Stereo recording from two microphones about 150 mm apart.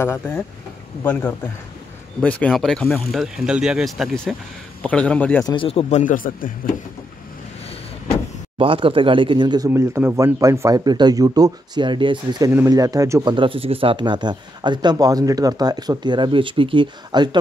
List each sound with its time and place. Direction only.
0.0 s a man's voice: 15° left (ahead or behind)
2.2 s a man's voice: 10° left (ahead or behind)
5.4 s speech: 30° left (ahead or behind)
5.7 s speech: 45° left (ahead or behind); by 6.8 s 70° left (ahead or behind)
8.5 s speech: 35° right (ahead or behind)
9.7 s speech: 15° right (ahead or behind); by 17.4 s 30° right (ahead or behind)